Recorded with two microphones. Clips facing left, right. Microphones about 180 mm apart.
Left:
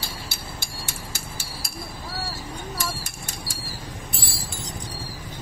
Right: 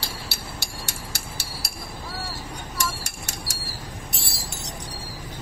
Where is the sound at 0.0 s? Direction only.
70° right (ahead or behind).